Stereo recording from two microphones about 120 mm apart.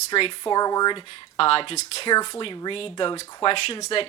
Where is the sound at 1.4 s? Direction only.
50° left (ahead or behind).